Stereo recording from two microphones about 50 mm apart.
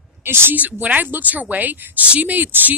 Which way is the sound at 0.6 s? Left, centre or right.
Right.